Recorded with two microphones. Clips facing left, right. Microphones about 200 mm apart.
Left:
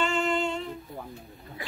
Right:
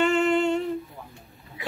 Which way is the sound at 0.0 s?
60° right (ahead or behind).